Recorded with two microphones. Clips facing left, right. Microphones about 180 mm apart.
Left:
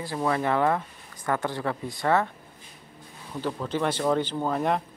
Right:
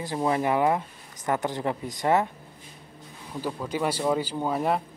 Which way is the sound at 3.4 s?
10° right (ahead or behind).